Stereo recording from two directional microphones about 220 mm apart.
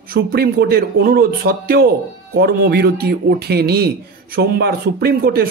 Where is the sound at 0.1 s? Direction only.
45° right (ahead or behind).